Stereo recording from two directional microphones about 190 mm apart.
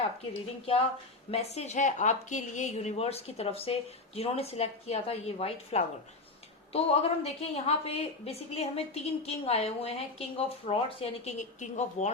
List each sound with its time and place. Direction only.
1.3 s a woman's voice: 35° left (ahead or behind)